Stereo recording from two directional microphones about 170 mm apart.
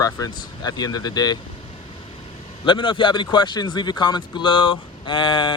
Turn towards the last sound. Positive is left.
turn(degrees=25)  # may be behind; listen again after turning